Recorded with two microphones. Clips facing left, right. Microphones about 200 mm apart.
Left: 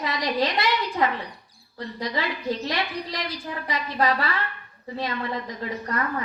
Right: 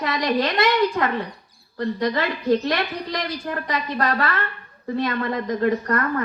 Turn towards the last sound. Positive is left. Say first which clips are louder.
# right 6 dB
turn(degrees=-55)  # may be behind; listen again after turning